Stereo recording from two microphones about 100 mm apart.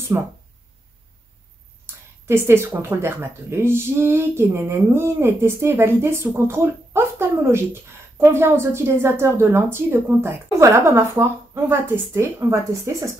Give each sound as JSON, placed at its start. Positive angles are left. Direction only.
{"t": 0.1, "sound": "speech", "side_deg": -25}
{"t": 2.2, "sound": "speech", "side_deg": -25}